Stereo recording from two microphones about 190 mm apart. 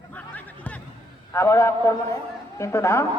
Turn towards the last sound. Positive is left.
turn(degrees=15)  # may be behind; listen again after turning